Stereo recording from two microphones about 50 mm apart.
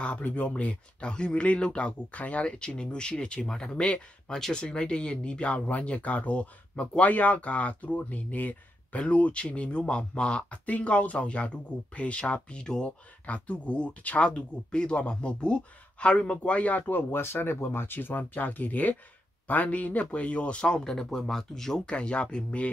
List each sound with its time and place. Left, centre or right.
0.0 s speech: left
7.1 s speech: left
13.3 s speech: left
16.8 s speech: left; by 21.8 s centre
21.8 s speech: left